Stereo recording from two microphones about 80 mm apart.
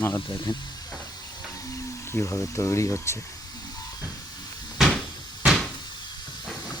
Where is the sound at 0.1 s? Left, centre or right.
Left.